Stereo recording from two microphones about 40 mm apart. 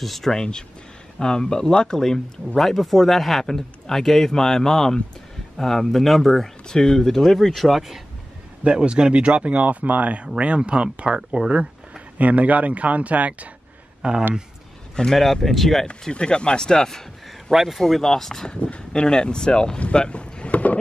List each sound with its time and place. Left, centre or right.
0.0 s speech: centre
0.3 s speech: centre
8.6 s speech: right
10.2 s speech: right
12.2 s speech: right
15.0 s speech: centre
16.1 s speech: left
17.5 s speech: centre
17.8 s speech: centre
18.5 s speech: left